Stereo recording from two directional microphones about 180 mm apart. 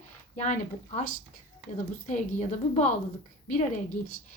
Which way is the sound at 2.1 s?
40° left (ahead or behind).